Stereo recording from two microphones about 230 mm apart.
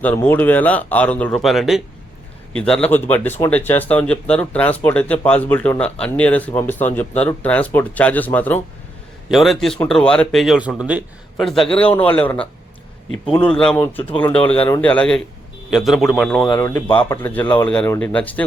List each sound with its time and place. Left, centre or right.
0.0 s speech: centre
16.5 s speech: centre